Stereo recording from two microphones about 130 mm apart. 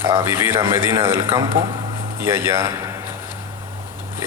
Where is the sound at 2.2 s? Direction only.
20° right (ahead or behind).